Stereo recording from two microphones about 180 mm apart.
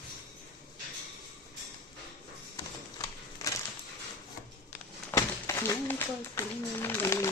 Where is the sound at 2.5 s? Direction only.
20° left (ahead or behind).